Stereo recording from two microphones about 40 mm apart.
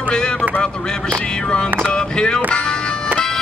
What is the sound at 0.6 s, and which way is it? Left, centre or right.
Speech, left.